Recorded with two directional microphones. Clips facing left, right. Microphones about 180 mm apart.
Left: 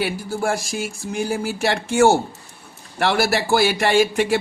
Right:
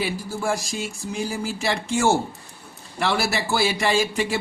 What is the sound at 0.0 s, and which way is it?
Speech, 60° left (ahead or behind).